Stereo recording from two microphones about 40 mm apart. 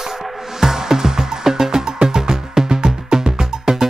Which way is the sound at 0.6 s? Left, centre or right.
Centre.